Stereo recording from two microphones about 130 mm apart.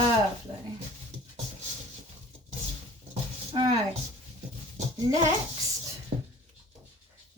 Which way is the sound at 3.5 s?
40° right (ahead or behind).